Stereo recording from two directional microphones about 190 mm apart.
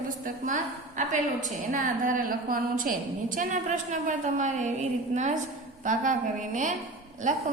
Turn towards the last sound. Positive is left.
turn(degrees=-40)  # may be behind; listen again after turning